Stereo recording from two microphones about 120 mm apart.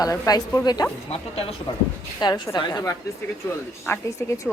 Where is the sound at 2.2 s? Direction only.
35° left (ahead or behind).